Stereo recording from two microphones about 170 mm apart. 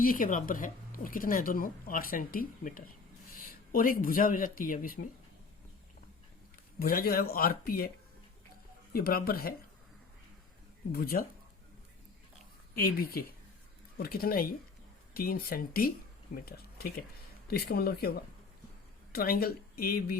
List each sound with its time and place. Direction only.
0.0 s speech: 55° left (ahead or behind)
6.7 s speech: 60° left (ahead or behind)
8.9 s speech: 60° left (ahead or behind)
10.9 s speech: 60° left (ahead or behind)
12.7 s speech: 60° left (ahead or behind)